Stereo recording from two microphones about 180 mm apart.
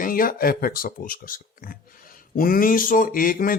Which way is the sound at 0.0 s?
50° left (ahead or behind).